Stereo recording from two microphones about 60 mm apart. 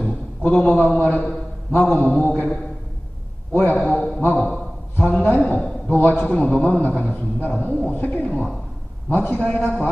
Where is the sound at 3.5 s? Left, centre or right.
Left.